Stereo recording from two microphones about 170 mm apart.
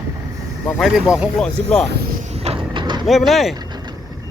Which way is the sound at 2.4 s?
25° right (ahead or behind).